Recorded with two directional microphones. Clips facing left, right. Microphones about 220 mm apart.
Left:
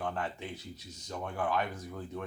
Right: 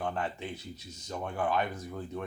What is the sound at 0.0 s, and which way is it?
Speech, 25° right (ahead or behind).